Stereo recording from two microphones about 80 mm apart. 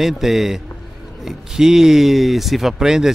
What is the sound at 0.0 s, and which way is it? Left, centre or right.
Speech, centre.